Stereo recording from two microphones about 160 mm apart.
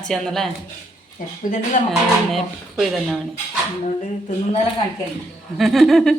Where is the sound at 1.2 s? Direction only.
60° left (ahead or behind).